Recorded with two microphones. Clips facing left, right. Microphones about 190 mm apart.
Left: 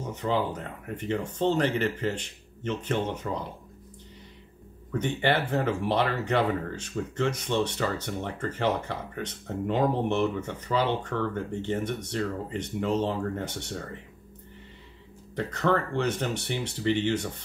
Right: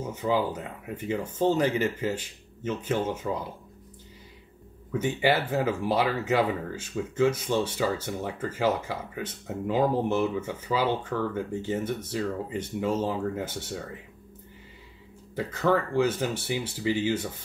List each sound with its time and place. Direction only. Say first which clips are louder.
0.1 s a man's voice: right 1 dB; 5° right (ahead or behind)
4.9 s speech: right 1 dB; 5° right (ahead or behind)
15.3 s speech: right 1 dB; 5° right (ahead or behind)